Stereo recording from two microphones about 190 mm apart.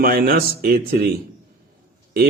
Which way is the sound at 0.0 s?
50° right (ahead or behind).